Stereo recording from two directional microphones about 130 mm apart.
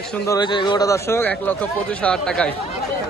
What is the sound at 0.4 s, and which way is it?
Speech, 35° left (ahead or behind).